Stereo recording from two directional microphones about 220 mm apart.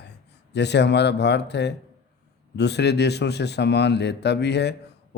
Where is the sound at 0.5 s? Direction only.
50° left (ahead or behind).